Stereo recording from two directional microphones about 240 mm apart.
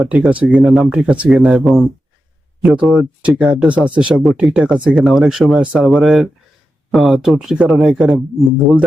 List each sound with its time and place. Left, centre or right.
0.0 s speech: centre